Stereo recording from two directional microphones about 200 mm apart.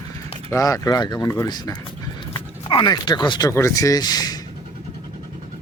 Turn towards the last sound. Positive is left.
turn(degrees=20)  # may be behind; listen again after turning